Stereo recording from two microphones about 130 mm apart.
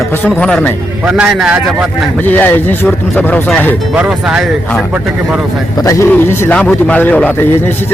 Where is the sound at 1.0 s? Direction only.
5° right (ahead or behind).